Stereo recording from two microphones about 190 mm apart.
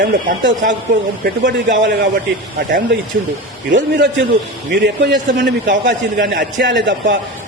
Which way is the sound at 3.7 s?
70° right (ahead or behind).